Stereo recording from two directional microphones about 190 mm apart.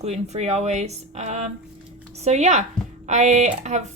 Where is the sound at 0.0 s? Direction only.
35° right (ahead or behind).